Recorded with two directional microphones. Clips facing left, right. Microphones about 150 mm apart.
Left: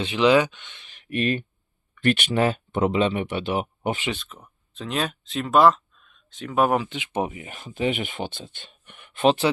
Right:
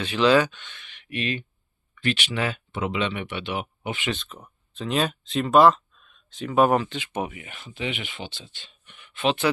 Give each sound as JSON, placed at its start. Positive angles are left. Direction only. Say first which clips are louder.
{"t": 0.0, "sound": "speech", "louder": "left 1 dB", "side_deg": 20}
{"t": 0.9, "sound": "a sound", "louder": "left 5 dB", "side_deg": 40}
{"t": 2.0, "sound": "speech", "louder": "left 6 dB", "side_deg": 50}
{"t": 4.1, "sound": "speech", "louder": "right 1 dB", "side_deg": 0}
{"t": 7.1, "sound": "speech", "louder": "left 3 dB", "side_deg": 30}